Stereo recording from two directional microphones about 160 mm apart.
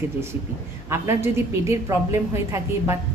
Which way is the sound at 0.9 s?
15° right (ahead or behind).